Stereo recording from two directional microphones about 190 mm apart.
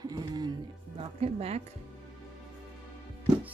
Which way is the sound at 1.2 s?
35° right (ahead or behind).